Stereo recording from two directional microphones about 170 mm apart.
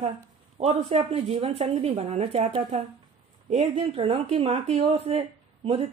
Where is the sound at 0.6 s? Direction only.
35° right (ahead or behind).